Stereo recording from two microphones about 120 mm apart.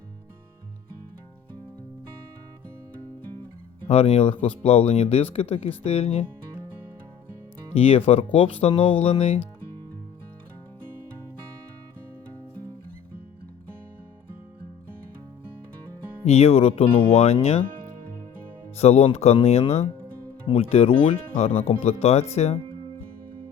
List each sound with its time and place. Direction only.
3.8 s speech: 60° left (ahead or behind)
7.8 s speech: 55° left (ahead or behind)
16.2 s speech: 60° left (ahead or behind)
18.8 s speech: 60° left (ahead or behind)